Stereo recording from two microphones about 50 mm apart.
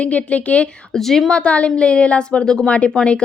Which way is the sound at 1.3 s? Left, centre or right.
Left.